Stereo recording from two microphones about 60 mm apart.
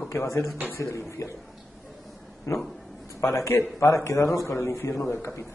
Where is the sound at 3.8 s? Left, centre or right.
Left.